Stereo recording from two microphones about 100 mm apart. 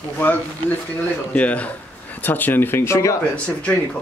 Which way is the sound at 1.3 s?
15° left (ahead or behind).